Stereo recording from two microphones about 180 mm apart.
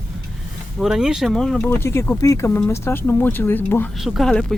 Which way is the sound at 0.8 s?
5° right (ahead or behind).